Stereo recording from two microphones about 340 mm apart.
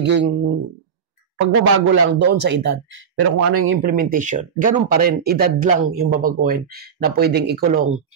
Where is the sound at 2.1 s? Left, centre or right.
Right.